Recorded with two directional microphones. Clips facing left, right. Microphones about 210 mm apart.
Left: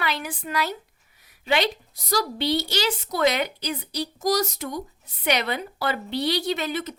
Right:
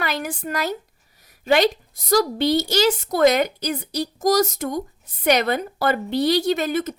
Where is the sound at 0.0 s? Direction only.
45° right (ahead or behind).